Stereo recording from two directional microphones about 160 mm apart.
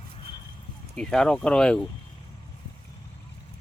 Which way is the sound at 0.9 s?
5° left (ahead or behind).